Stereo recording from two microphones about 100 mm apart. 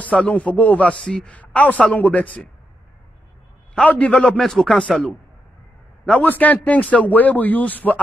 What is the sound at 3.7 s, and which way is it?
Speech, 15° left (ahead or behind).